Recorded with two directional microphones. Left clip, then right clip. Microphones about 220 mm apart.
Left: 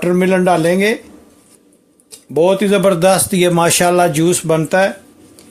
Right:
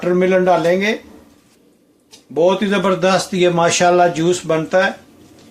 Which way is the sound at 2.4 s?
45° left (ahead or behind).